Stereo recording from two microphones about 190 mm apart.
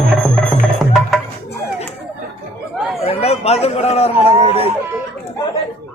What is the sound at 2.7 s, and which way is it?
Chatter, centre (ahead or behind).